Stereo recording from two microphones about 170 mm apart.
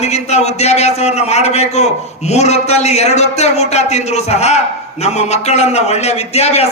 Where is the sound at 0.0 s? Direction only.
40° left (ahead or behind).